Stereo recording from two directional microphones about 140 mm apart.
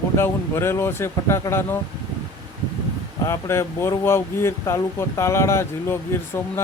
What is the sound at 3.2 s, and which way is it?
Speech, 20° left (ahead or behind).